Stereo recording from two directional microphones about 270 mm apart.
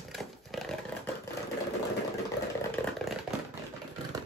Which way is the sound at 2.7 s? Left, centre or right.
Centre.